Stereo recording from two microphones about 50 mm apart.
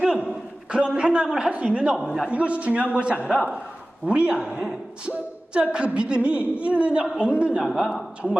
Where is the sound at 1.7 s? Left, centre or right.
Right.